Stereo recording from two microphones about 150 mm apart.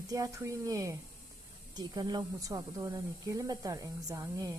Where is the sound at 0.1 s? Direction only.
20° right (ahead or behind).